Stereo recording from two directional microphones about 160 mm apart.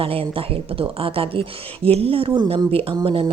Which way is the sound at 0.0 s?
35° right (ahead or behind).